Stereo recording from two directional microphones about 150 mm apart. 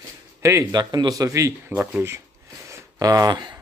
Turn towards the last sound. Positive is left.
turn(degrees=-30)  # may be behind; listen again after turning